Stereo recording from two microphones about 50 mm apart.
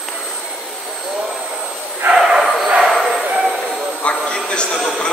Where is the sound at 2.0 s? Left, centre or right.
Right.